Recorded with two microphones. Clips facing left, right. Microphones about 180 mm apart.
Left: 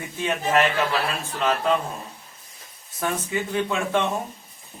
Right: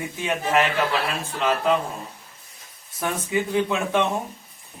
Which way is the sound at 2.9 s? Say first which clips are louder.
Right 1 dB; 10° right (ahead or behind).